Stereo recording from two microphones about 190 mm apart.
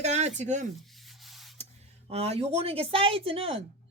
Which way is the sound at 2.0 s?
35° right (ahead or behind).